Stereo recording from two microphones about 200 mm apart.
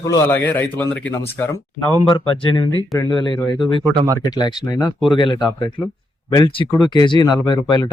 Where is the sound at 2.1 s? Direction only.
25° left (ahead or behind).